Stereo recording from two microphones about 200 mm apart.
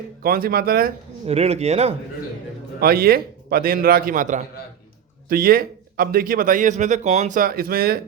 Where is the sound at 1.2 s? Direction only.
30° right (ahead or behind).